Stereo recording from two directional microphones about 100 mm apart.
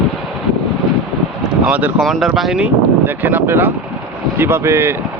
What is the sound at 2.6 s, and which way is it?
Speech, 20° right (ahead or behind).